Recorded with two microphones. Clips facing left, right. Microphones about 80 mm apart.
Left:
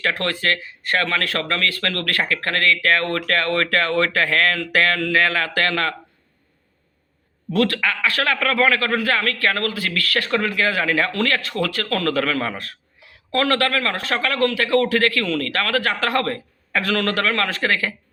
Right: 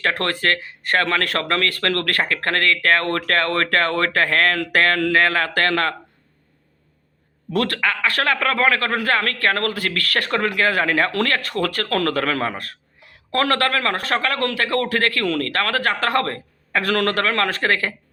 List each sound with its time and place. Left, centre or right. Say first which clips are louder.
0.0 s a man's voice: right 1 dB; right
7.5 s a man's voice: left 1 dB; right